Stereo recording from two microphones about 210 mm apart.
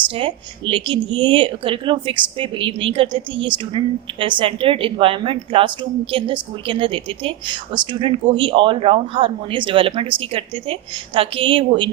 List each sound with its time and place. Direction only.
0.1 s a woman's voice: 25° right (ahead or behind)